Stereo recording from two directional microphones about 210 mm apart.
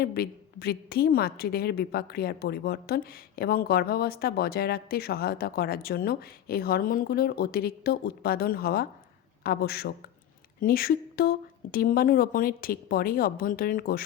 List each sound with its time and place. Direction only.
0.0 s a woman's voice: 50° left (ahead or behind)